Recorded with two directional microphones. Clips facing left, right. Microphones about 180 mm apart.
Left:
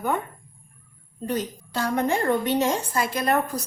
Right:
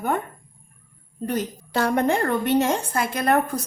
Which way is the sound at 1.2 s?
60° right (ahead or behind).